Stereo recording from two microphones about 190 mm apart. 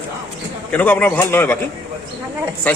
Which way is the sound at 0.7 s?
10° left (ahead or behind).